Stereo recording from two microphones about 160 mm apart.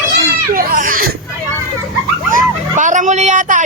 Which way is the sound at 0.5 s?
60° right (ahead or behind).